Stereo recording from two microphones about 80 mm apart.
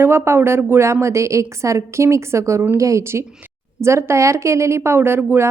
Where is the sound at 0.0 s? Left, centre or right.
Right.